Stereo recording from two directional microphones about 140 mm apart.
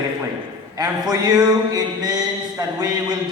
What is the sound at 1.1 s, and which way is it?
A man's voice, 30° right (ahead or behind).